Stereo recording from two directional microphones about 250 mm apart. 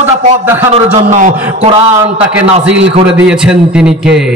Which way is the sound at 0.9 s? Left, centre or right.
Right.